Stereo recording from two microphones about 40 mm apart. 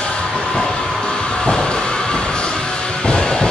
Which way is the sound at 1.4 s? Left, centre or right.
Left.